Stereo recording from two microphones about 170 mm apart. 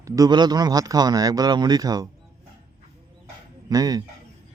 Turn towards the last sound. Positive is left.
turn(degrees=-20)  # may be behind; listen again after turning